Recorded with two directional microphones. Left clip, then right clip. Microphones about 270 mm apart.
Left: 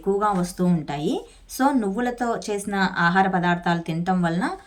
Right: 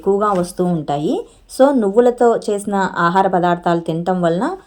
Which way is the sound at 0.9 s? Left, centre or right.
Centre.